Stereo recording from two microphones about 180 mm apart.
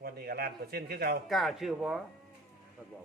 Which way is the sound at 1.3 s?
Centre (ahead or behind).